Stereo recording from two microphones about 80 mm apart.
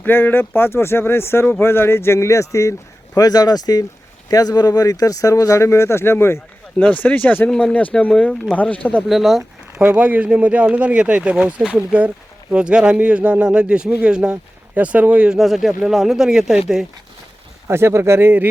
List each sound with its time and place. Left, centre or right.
0.0 s speech: left
3.2 s speech: left
7.0 s speech: centre
8.5 s speech: centre
9.0 s speech: centre
9.8 s a man's voice: right
15.4 s speech: centre
17.7 s speech: right